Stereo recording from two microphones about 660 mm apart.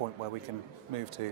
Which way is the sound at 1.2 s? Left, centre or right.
Right.